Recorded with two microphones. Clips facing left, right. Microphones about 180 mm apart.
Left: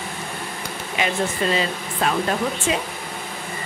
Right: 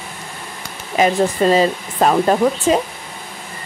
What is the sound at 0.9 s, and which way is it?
Speech, 40° right (ahead or behind).